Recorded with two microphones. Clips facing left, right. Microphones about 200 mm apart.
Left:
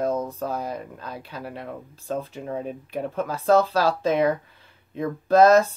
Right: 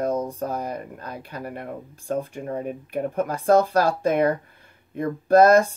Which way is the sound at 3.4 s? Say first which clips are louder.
Right 1 dB; 15° right (ahead or behind).